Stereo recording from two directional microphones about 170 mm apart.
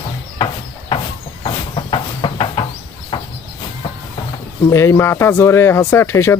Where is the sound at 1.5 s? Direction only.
30° left (ahead or behind).